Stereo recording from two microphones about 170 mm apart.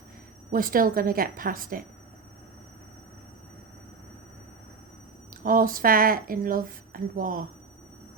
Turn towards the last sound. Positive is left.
turn(degrees=-55)  # may be behind; listen again after turning